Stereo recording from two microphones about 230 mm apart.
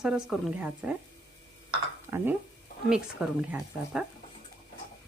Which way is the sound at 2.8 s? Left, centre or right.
Centre.